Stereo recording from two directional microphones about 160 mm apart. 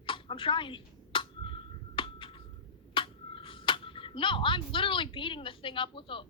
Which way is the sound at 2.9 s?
35° left (ahead or behind).